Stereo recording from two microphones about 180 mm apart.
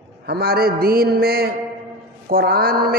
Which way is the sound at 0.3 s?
60° right (ahead or behind).